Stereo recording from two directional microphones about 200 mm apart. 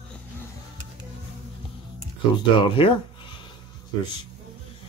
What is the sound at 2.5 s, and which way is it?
Speech, 25° left (ahead or behind).